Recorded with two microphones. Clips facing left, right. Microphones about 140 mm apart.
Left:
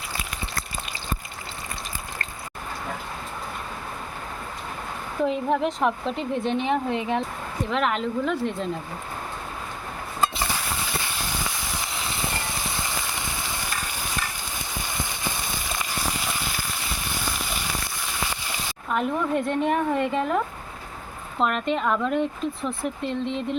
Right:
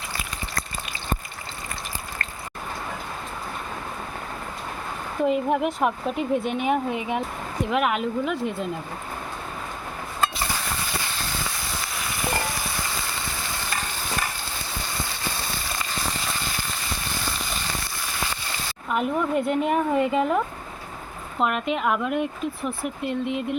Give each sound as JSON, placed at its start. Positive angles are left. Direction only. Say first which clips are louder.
{"t": 5.2, "sound": "speech", "louder": "right 1 dB", "side_deg": -5}
{"t": 15.0, "sound": "a sound", "louder": "even", "side_deg": 15}
{"t": 18.9, "sound": "speech", "louder": "right 1 dB", "side_deg": -5}
{"t": 21.3, "sound": "speech", "louder": "even", "side_deg": -5}